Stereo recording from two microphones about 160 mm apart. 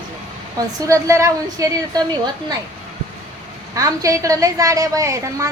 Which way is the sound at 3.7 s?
20° right (ahead or behind).